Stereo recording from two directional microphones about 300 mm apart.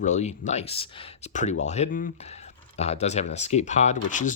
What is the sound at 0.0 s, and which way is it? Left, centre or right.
Speech, left.